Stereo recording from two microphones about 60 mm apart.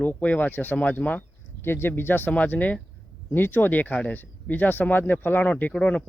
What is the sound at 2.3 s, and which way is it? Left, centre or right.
Speech, left.